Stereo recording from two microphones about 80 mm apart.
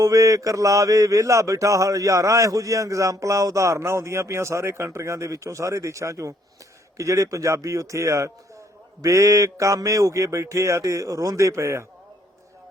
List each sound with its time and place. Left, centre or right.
0.0 s mantra: right